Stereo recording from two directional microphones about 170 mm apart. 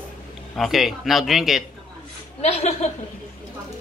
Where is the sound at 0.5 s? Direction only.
Centre (ahead or behind).